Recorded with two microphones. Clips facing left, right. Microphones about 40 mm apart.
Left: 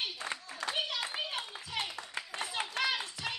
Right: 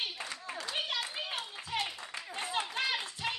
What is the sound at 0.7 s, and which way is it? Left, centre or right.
Clapping, right.